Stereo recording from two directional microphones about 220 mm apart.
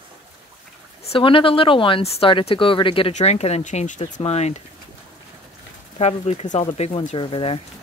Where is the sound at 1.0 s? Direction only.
25° left (ahead or behind).